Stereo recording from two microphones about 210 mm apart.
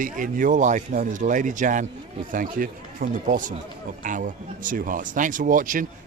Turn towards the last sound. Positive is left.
turn(degrees=-40)  # may be behind; listen again after turning